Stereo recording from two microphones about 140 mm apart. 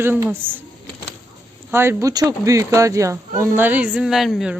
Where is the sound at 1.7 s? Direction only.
15° right (ahead or behind).